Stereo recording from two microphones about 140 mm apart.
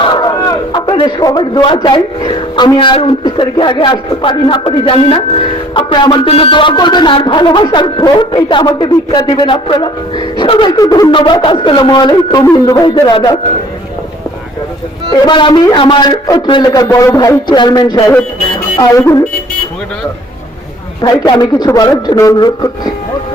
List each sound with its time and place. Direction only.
0.1 s a man's voice: 30° left (ahead or behind)
15.1 s a man's voice: 30° left (ahead or behind)
21.0 s a man's voice: 30° left (ahead or behind)